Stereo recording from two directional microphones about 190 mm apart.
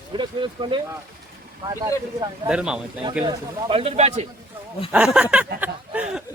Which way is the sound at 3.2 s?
30° right (ahead or behind).